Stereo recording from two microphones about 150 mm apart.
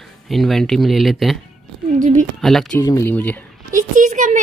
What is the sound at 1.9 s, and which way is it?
Speech, 60° right (ahead or behind).